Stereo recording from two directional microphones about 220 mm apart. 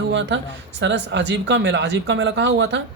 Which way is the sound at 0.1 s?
55° right (ahead or behind).